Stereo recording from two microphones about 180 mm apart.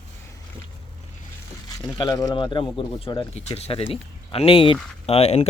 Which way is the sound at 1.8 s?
20° left (ahead or behind).